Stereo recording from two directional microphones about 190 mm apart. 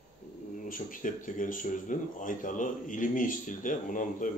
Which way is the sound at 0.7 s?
45° left (ahead or behind).